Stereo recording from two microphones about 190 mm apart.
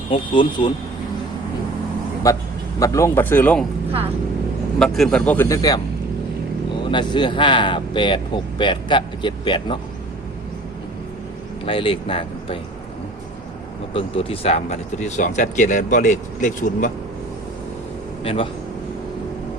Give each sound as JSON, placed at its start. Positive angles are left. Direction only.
{"t": 0.1, "sound": "speech", "side_deg": 25}
{"t": 2.3, "sound": "speech", "side_deg": 15}
{"t": 4.8, "sound": "speech", "side_deg": 5}
{"t": 6.9, "sound": "speech", "side_deg": 25}
{"t": 11.6, "sound": "speech", "side_deg": 30}
{"t": 13.9, "sound": "speech", "side_deg": 30}
{"t": 18.2, "sound": "speech", "side_deg": 30}